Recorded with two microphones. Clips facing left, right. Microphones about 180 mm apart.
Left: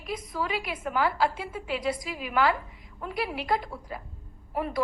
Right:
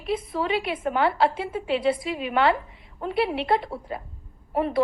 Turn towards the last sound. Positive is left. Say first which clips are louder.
# right 6 dB
turn(degrees=-25)  # may be behind; listen again after turning